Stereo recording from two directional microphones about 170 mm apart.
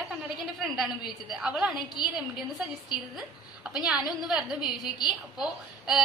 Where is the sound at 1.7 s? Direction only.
25° left (ahead or behind).